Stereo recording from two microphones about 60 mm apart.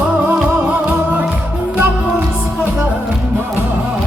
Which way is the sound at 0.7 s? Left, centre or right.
Right.